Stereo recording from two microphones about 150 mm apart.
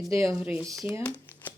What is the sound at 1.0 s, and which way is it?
Crumpling, 10° left (ahead or behind).